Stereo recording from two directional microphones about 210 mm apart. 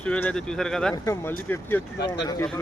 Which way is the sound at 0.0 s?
5° left (ahead or behind).